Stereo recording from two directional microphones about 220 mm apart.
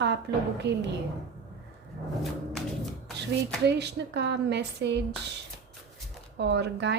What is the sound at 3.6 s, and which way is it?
Speech, 50° right (ahead or behind).